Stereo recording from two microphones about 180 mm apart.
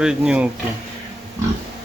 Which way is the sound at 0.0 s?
5° right (ahead or behind).